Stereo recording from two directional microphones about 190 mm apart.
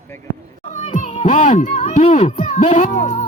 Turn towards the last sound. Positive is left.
turn(degrees=45)  # may be behind; listen again after turning